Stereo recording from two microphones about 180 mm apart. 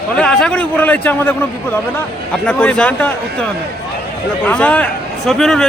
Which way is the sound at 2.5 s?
5° left (ahead or behind).